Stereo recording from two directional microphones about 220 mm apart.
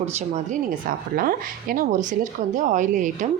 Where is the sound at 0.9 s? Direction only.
40° right (ahead or behind).